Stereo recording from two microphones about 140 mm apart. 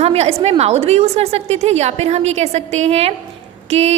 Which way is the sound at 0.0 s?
45° right (ahead or behind).